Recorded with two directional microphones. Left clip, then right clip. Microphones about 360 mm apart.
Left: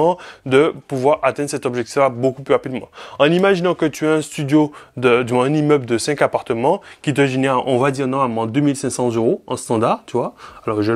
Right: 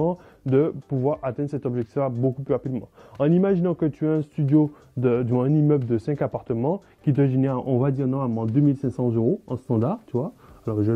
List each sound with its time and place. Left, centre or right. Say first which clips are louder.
0.5 s speech: left 7 dB; centre